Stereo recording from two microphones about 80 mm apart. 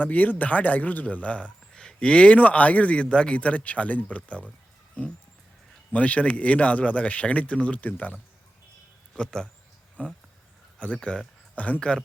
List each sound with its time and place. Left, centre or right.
0.0 s a man's voice: centre
5.9 s a man's voice: centre
9.1 s a man's voice: centre